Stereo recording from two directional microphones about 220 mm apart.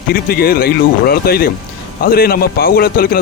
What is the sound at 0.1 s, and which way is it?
A man's voice, 45° left (ahead or behind).